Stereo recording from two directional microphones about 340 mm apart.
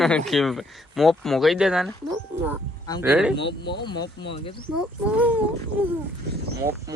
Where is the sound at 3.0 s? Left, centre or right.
Centre.